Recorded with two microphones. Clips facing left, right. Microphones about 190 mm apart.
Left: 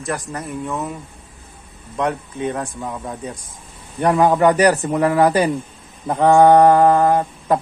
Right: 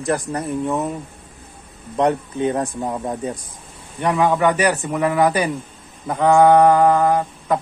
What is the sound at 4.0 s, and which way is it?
Speech, 40° left (ahead or behind).